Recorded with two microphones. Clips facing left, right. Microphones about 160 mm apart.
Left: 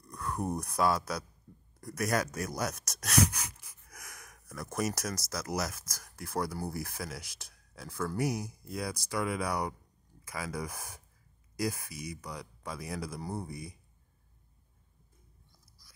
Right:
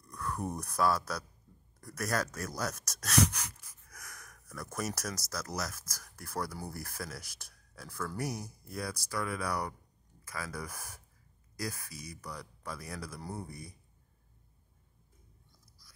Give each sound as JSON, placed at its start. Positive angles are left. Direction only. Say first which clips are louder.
{"t": 0.1, "sound": "speech", "louder": "left 3 dB", "side_deg": 15}
{"t": 8.7, "sound": "speech", "louder": "left 3 dB", "side_deg": 20}
{"t": 13.2, "sound": "speech", "louder": "left 4 dB", "side_deg": 10}